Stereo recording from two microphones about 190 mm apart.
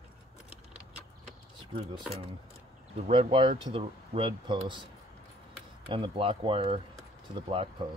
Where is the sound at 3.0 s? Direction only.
30° right (ahead or behind).